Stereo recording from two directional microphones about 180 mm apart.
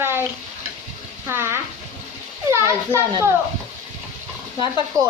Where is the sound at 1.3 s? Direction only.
15° right (ahead or behind).